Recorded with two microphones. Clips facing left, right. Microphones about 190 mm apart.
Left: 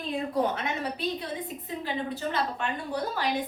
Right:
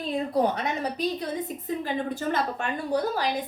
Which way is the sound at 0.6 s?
40° right (ahead or behind).